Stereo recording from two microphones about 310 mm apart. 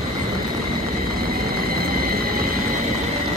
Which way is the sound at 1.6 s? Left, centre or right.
Right.